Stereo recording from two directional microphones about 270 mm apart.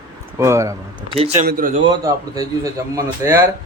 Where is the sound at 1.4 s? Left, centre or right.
Right.